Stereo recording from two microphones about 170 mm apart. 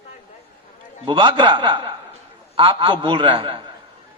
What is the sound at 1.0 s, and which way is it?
A man's voice, 30° right (ahead or behind).